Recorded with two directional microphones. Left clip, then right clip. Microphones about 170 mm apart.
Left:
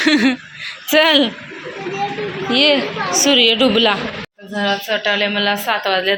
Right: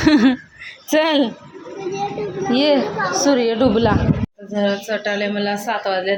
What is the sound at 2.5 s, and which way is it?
A woman's voice, 20° right (ahead or behind).